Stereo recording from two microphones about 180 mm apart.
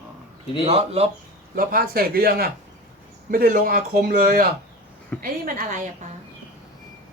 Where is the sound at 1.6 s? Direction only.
55° right (ahead or behind).